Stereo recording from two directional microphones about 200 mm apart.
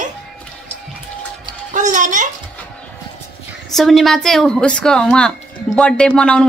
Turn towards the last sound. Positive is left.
turn(degrees=5)  # may be behind; listen again after turning